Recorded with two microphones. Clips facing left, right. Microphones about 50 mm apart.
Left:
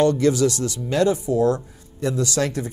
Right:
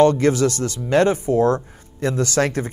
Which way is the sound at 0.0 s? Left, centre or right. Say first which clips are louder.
Right 2 dB; right.